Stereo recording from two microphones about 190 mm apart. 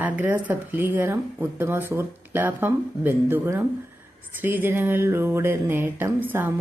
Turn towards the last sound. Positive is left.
turn(degrees=-10)  # may be behind; listen again after turning